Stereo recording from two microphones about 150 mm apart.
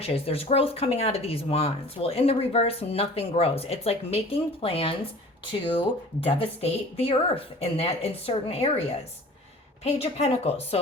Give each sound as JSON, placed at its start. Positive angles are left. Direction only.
{"t": 0.0, "sound": "a woman's voice", "side_deg": 40}